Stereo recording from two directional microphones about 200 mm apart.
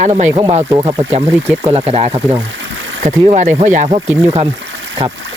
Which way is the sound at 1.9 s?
30° right (ahead or behind).